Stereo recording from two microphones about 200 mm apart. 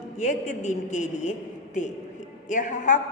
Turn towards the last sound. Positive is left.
turn(degrees=40)  # may be behind; listen again after turning